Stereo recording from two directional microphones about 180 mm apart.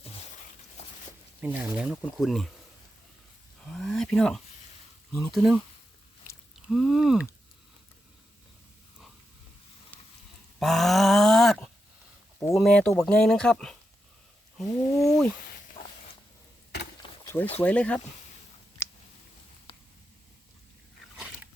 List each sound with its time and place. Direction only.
1.4 s speech: 5° right (ahead or behind)
3.7 s wild animals: 5° left (ahead or behind)
5.1 s speech: centre (ahead or behind)
6.7 s speech: centre (ahead or behind)
10.6 s a sound: centre (ahead or behind)
12.5 s speech: 5° left (ahead or behind)
15.8 s a sound: 30° left (ahead or behind)
17.6 s speech: 5° left (ahead or behind)